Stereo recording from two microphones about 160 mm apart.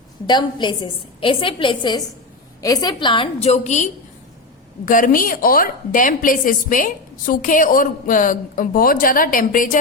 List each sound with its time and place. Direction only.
0.3 s a woman's voice: 30° left (ahead or behind); by 3.8 s 45° left (ahead or behind)
4.9 s a woman's voice: 55° left (ahead or behind)